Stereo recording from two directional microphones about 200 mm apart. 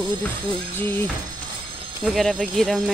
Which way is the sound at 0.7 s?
10° left (ahead or behind).